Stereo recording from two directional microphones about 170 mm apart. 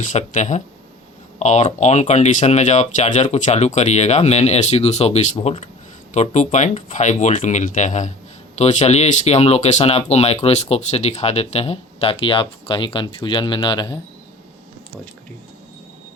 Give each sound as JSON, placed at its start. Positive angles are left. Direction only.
{"t": 0.0, "sound": "speech", "side_deg": 45}